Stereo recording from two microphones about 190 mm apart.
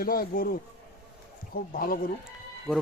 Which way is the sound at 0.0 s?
50° left (ahead or behind).